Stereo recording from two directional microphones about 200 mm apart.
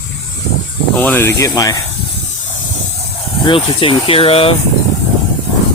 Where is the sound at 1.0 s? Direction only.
10° left (ahead or behind).